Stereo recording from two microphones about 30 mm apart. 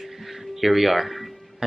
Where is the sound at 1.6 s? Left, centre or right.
Right.